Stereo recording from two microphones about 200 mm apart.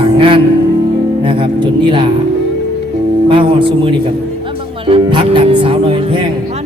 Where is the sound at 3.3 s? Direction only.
25° right (ahead or behind).